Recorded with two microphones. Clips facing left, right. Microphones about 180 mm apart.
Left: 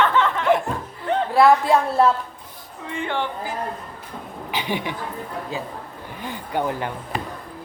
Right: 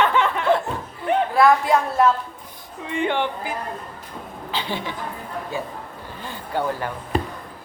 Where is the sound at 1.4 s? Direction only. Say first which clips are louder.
Left 2 dB; 30° left (ahead or behind).